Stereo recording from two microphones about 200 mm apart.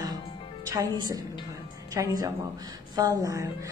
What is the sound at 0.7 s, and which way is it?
A woman's voice, 20° right (ahead or behind).